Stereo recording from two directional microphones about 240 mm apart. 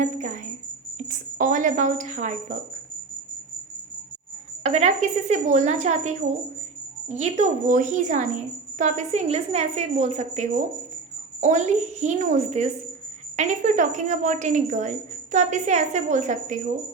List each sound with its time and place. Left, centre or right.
0.0 s a woman's voice: right
4.6 s a woman's voice: right